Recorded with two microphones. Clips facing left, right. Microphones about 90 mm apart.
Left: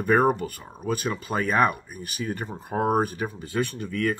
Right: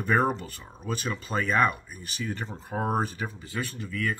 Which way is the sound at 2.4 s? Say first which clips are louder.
Left 6 dB; 10° left (ahead or behind).